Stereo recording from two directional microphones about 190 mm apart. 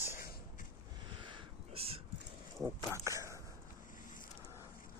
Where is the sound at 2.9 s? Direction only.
15° right (ahead or behind).